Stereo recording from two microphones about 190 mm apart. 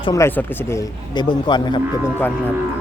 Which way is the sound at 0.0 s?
15° left (ahead or behind).